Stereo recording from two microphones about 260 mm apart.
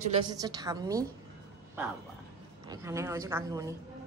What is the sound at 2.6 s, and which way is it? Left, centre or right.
A woman's voice, centre.